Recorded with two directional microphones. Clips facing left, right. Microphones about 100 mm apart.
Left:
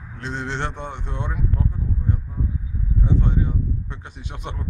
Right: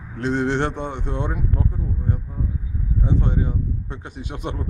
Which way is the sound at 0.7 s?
15° right (ahead or behind).